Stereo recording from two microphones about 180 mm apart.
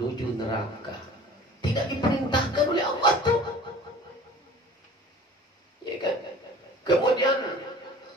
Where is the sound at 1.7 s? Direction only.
25° left (ahead or behind).